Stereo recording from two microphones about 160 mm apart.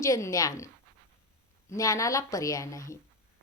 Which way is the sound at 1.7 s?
20° left (ahead or behind).